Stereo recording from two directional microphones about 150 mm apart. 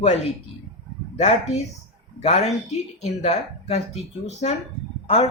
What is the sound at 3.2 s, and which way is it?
Speech, 45° left (ahead or behind).